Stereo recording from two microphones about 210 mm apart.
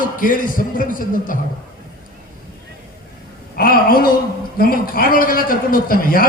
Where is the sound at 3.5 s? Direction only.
45° left (ahead or behind).